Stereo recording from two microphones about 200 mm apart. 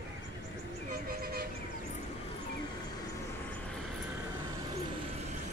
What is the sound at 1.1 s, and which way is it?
Vehicle, 50° right (ahead or behind).